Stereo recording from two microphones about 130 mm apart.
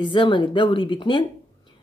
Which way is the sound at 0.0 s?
40° left (ahead or behind).